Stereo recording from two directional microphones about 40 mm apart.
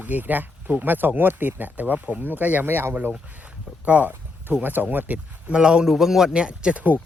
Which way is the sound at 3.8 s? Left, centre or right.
Right.